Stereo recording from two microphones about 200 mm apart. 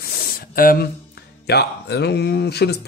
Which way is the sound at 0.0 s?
50° left (ahead or behind).